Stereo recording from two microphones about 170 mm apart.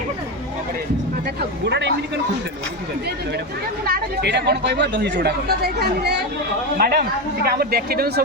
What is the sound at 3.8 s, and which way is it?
Speech, 70° right (ahead or behind).